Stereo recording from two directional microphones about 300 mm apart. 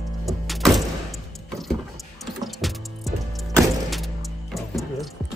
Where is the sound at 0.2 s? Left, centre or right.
Centre.